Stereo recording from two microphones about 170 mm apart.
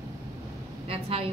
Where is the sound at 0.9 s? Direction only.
35° right (ahead or behind).